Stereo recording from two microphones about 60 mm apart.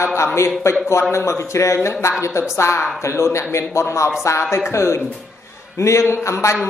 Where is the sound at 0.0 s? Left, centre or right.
Left.